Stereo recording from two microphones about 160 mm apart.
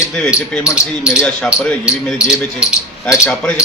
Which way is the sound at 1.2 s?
20° left (ahead or behind).